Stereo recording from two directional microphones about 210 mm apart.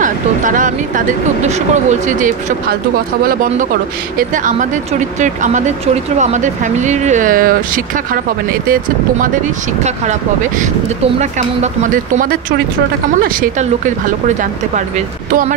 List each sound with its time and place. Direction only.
0.0 s speech: 40° right (ahead or behind)
4.2 s speech: 40° right (ahead or behind)
11.1 s speech: 35° right (ahead or behind)
13.2 s speech: 40° right (ahead or behind)